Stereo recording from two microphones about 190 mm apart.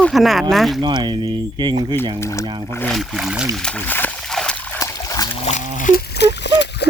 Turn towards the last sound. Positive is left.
turn(degrees=65)  # may be behind; listen again after turning